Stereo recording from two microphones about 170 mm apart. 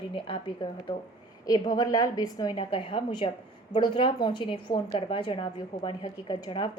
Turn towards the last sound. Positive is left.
turn(degrees=25)  # may be behind; listen again after turning